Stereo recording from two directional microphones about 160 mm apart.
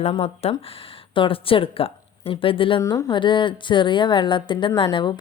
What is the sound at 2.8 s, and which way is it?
A woman's voice, 20° left (ahead or behind).